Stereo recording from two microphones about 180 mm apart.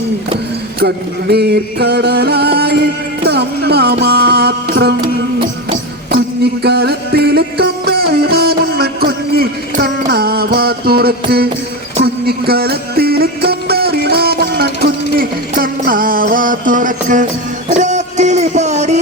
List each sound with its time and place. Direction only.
0.8 s music: 65° right (ahead or behind)
6.1 s music: 60° right (ahead or behind); by 17.2 s 45° right (ahead or behind)
17.7 s a sound: 40° right (ahead or behind)